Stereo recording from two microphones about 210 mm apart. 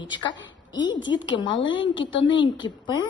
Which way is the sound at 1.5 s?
65° left (ahead or behind).